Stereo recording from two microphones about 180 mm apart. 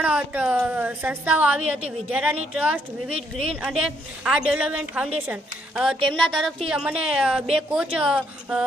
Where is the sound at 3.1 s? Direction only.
35° right (ahead or behind).